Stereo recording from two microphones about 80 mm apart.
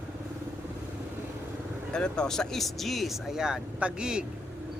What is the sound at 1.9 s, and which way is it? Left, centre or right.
Speech, centre.